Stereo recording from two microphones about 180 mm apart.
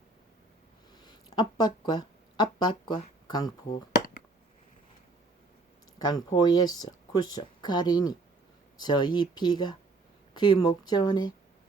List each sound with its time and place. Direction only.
1.0 s speech: 20° left (ahead or behind)
6.0 s speech: 20° left (ahead or behind)